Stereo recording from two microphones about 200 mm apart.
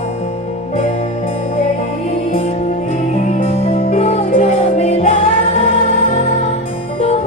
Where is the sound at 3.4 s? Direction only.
30° left (ahead or behind).